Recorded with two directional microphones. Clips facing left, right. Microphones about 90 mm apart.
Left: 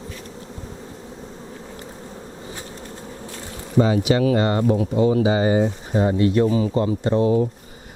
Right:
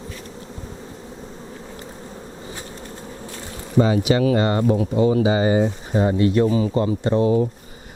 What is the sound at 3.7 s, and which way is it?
Speech, 15° right (ahead or behind).